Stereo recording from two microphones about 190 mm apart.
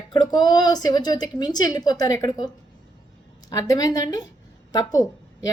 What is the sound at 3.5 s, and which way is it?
A woman's voice, 20° left (ahead or behind).